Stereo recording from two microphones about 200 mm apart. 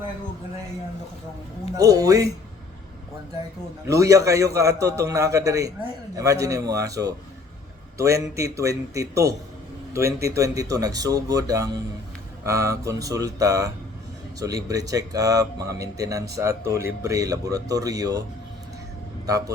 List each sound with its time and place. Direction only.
1.7 s a man's voice: 15° right (ahead or behind)
3.8 s a man's voice: 15° right (ahead or behind)
19.2 s a man's voice: 15° right (ahead or behind)